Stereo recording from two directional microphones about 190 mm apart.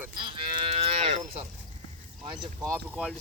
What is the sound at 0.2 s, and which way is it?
Cattle, 25° right (ahead or behind).